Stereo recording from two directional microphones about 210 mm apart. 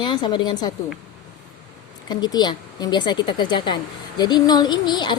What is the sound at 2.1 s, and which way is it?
A woman's voice, 20° left (ahead or behind).